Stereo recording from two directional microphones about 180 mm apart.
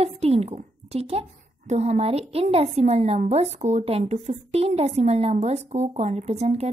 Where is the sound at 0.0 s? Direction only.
35° right (ahead or behind).